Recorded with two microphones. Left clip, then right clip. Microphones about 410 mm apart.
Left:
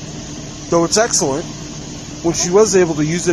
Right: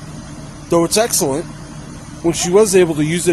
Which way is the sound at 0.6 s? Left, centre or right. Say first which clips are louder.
Even; right.